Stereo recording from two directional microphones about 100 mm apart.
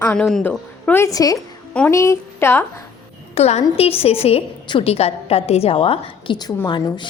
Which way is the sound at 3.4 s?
90° left.